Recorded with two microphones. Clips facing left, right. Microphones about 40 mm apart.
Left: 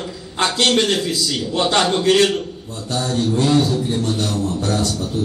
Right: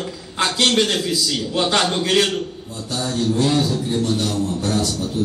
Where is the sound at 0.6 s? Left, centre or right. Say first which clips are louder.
Left 1 dB; centre.